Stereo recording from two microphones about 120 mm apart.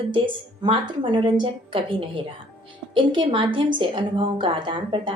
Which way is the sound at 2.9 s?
45° right (ahead or behind).